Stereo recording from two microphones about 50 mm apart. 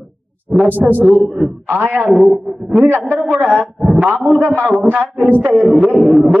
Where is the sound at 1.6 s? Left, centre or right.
Right.